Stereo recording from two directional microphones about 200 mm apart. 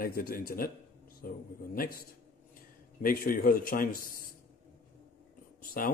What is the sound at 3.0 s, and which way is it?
A man's voice, 45° left (ahead or behind).